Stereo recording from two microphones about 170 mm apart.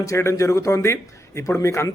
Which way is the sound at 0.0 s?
20° left (ahead or behind).